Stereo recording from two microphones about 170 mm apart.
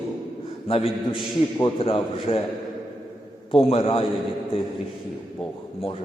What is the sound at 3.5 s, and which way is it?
Speech, 35° left (ahead or behind).